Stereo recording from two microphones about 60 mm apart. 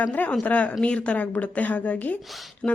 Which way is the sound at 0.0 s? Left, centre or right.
Left.